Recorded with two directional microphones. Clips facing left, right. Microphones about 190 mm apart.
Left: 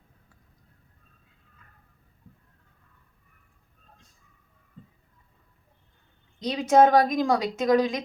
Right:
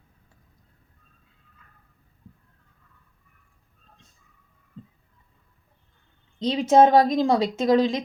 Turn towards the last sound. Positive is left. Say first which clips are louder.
# right 2 dB
turn(degrees=-25)  # may be behind; listen again after turning